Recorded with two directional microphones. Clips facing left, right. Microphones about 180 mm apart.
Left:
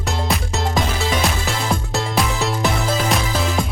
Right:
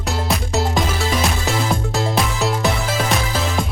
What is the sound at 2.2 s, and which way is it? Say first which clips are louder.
Music: left 2 dB; centre (ahead or behind).